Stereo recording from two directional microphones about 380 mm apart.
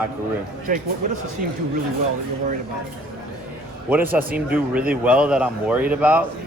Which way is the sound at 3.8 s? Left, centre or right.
Centre.